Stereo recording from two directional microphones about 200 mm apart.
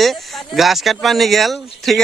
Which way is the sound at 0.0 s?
Centre (ahead or behind).